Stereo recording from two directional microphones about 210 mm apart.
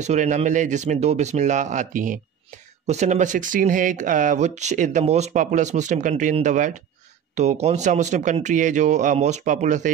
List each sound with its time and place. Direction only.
0.0 s speech: 35° right (ahead or behind)